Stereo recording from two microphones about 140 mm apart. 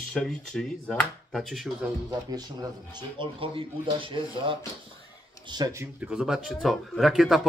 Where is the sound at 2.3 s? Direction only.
30° right (ahead or behind).